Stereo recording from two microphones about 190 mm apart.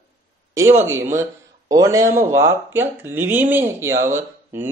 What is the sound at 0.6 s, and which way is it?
Speech, 15° right (ahead or behind).